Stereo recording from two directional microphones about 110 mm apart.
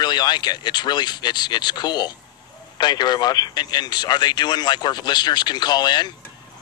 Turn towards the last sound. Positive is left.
turn(degrees=40)  # may be behind; listen again after turning